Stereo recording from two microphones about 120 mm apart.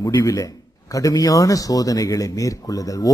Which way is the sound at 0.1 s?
25° left (ahead or behind).